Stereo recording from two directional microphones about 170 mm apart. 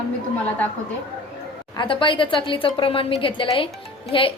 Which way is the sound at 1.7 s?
30° left (ahead or behind).